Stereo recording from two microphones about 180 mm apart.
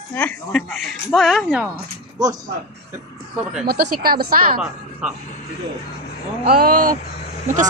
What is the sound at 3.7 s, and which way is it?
Speech, 55° right (ahead or behind).